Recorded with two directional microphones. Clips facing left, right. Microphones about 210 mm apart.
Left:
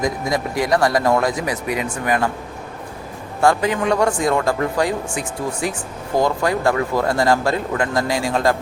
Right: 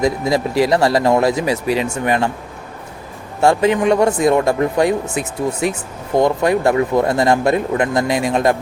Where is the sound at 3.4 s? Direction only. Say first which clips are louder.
Right 3 dB; 25° right (ahead or behind).